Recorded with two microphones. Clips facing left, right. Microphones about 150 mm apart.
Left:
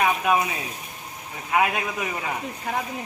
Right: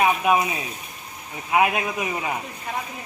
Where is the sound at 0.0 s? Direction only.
10° right (ahead or behind).